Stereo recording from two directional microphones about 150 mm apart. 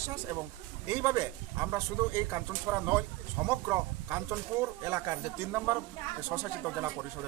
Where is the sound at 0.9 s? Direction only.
20° right (ahead or behind).